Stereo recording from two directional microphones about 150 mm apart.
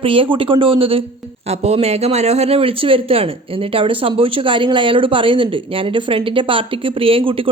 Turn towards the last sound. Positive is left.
turn(degrees=-40)  # may be behind; listen again after turning